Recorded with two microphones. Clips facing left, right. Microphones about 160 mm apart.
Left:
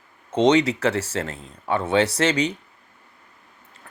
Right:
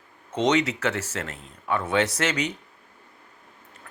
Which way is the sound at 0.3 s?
30° left (ahead or behind).